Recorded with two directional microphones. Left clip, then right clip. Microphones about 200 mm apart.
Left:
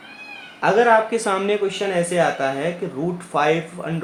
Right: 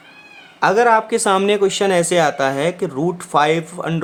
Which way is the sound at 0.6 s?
30° right (ahead or behind).